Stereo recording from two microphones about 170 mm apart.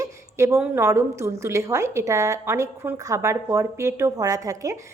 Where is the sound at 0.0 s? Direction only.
15° right (ahead or behind).